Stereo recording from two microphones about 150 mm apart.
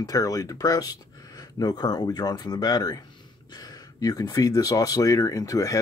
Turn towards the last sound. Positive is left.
turn(degrees=25)  # may be behind; listen again after turning